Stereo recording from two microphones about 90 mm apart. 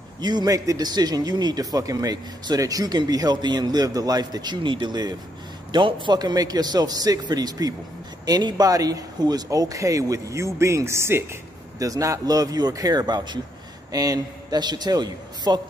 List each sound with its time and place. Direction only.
0.2 s speech: 55° right (ahead or behind)
5.7 s speech: 65° right (ahead or behind)